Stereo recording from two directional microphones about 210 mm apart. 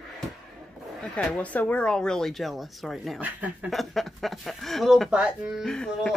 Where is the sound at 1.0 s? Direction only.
5° left (ahead or behind).